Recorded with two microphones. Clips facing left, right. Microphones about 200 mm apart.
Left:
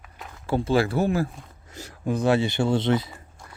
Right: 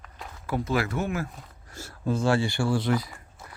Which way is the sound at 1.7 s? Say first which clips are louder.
Left 1 dB; 15° left (ahead or behind).